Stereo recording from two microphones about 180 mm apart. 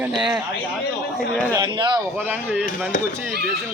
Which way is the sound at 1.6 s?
25° right (ahead or behind).